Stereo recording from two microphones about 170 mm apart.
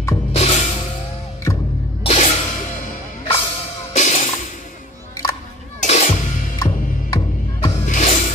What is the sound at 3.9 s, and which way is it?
Music, 45° left (ahead or behind).